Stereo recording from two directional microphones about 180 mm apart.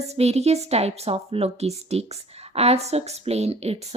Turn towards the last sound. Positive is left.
turn(degrees=-35)  # may be behind; listen again after turning